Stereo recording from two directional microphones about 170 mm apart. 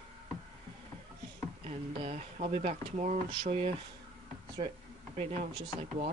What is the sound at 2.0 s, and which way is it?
Speech, 35° right (ahead or behind).